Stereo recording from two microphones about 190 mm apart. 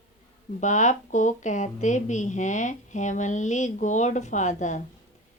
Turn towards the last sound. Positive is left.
turn(degrees=40)  # may be behind; listen again after turning